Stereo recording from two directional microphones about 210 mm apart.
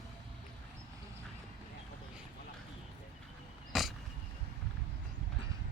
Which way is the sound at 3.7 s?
Centre (ahead or behind).